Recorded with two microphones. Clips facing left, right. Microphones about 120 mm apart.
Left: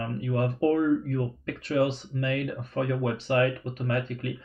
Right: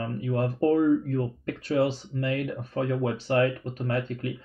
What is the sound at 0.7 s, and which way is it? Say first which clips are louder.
Speech: right 2 dB; 40° right (ahead or behind).